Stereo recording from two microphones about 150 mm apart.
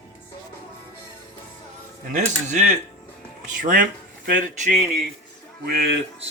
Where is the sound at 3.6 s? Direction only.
65° right (ahead or behind).